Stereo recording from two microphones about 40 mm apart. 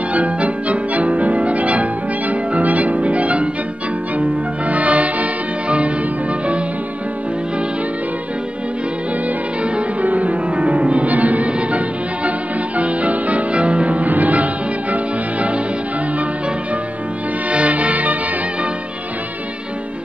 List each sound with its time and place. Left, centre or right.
0.1 s music: right
10.0 s music: right
17.5 s music: right